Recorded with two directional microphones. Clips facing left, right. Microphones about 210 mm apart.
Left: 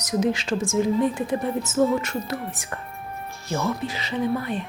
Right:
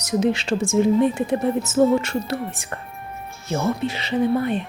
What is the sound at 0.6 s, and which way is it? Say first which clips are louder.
A woman's voice: right 5 dB; 65° right (ahead or behind).